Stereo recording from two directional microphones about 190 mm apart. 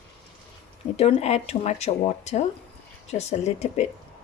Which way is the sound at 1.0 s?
30° left (ahead or behind).